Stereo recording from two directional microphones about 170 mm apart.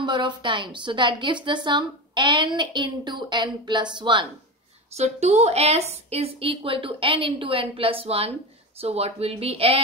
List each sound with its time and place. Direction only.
0.0 s a woman's voice: 25° right (ahead or behind)
4.9 s a woman's voice: 40° right (ahead or behind)